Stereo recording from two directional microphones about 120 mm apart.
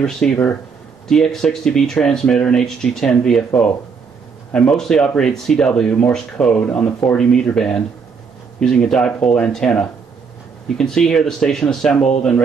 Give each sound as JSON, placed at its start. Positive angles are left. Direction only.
{"t": 0.0, "sound": "speech", "side_deg": 10}